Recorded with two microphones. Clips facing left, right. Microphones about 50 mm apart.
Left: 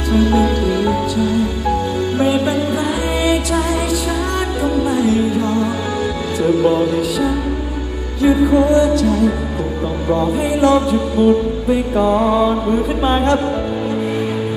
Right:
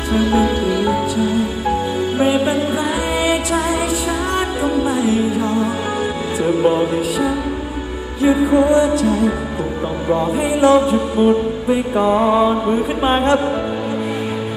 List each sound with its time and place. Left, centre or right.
0.1 s music: right
4.9 s music: centre
6.4 s music: right
8.2 s music: right